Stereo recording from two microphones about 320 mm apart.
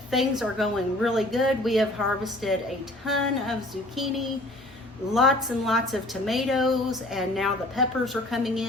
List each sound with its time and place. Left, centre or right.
0.1 s a woman's voice: centre
3.9 s a woman's voice: centre